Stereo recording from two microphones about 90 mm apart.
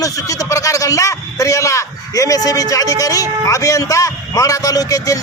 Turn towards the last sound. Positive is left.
turn(degrees=40)  # may be behind; listen again after turning